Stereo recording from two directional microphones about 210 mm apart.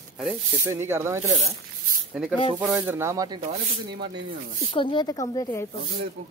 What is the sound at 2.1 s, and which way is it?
Speech, centre (ahead or behind).